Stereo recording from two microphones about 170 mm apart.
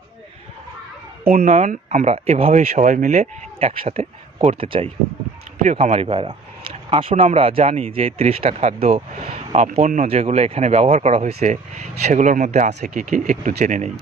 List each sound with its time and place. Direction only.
1.2 s speech: 50° right (ahead or behind); by 4.9 s 35° right (ahead or behind)
5.6 s speech: 45° right (ahead or behind)